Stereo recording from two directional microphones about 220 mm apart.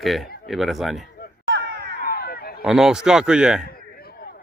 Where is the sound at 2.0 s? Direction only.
40° left (ahead or behind).